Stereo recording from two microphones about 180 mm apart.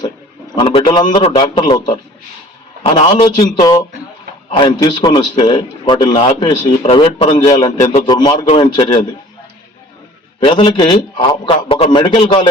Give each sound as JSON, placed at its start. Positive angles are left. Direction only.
{"t": 0.5, "sound": "a man's voice", "side_deg": 30}
{"t": 10.4, "sound": "a man's voice", "side_deg": 30}